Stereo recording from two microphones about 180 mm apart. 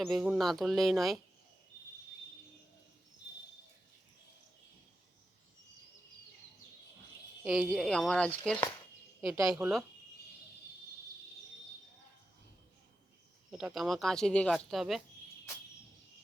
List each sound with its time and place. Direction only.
0.0 s speech: centre (ahead or behind)
7.4 s speech: centre (ahead or behind)
13.5 s speech: 5° right (ahead or behind)